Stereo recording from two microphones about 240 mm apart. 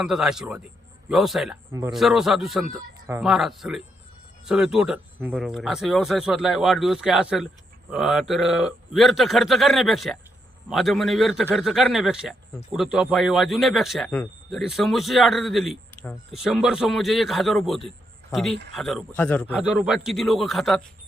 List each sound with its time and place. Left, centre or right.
0.0 s speech: centre
19.5 s speech: centre